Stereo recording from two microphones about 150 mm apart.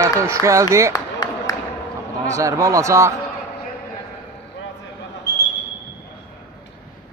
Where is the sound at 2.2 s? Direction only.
20° right (ahead or behind).